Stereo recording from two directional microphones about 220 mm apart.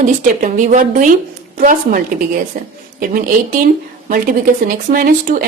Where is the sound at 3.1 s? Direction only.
40° right (ahead or behind).